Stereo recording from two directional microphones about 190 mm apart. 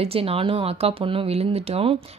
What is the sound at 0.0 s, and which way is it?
Speech, 30° right (ahead or behind).